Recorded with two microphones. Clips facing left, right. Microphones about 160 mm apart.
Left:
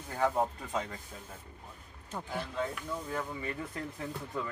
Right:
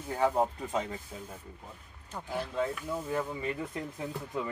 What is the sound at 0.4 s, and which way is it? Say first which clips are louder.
Speech: right 3 dB; 30° right (ahead or behind).